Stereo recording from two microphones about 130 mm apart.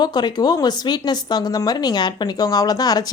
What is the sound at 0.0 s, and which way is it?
Speech, 35° left (ahead or behind).